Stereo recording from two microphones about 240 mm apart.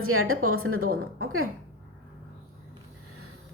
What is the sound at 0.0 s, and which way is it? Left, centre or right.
Speech, right.